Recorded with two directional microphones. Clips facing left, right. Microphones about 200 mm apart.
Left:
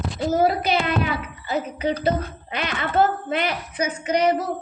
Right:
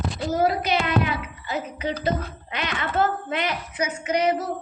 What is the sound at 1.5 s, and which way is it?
Speech, 35° left (ahead or behind).